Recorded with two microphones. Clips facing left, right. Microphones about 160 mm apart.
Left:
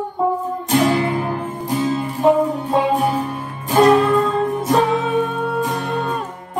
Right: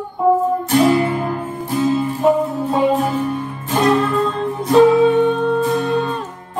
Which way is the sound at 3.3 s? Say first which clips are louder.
Right 2 dB; 5° left (ahead or behind).